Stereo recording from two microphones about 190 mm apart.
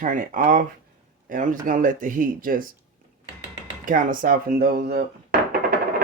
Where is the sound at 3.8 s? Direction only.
45° right (ahead or behind).